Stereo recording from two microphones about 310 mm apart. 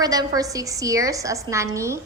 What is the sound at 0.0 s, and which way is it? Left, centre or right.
A woman's voice, centre.